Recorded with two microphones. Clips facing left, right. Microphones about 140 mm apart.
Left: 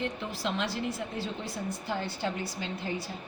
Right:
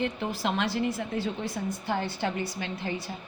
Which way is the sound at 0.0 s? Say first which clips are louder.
Right 4 dB; 65° right (ahead or behind).